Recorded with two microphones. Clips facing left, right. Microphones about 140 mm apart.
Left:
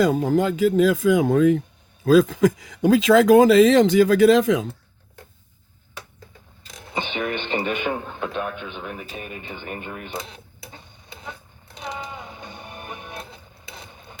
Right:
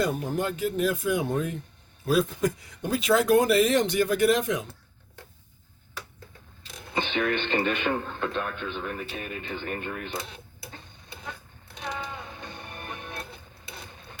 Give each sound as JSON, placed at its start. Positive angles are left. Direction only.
{"t": 0.0, "sound": "speech", "side_deg": 90}
{"t": 6.9, "sound": "speech", "side_deg": 15}
{"t": 11.9, "sound": "music", "side_deg": 15}
{"t": 13.9, "sound": "mechanisms", "side_deg": 10}